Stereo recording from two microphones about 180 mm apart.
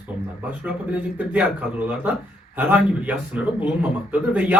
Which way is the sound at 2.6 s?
10° right (ahead or behind).